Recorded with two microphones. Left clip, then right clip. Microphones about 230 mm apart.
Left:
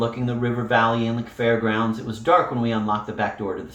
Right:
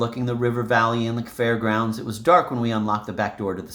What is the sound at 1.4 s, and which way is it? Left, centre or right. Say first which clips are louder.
Speech: left 1 dB; right.